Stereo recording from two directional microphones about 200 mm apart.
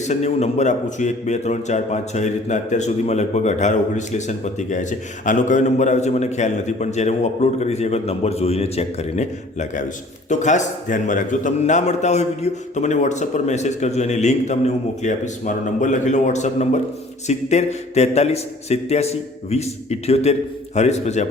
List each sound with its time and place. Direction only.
0.0 s a man's voice: 35° left (ahead or behind)